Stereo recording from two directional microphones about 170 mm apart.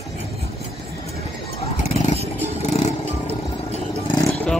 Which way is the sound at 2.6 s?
40° left (ahead or behind).